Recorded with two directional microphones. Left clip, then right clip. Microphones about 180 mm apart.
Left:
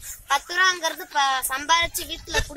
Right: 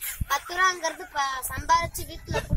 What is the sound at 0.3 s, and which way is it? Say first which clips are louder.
Speech: left 3 dB; 10° left (ahead or behind).